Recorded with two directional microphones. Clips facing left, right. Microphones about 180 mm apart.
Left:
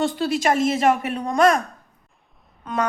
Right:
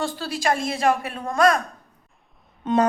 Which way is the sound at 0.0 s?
20° left (ahead or behind).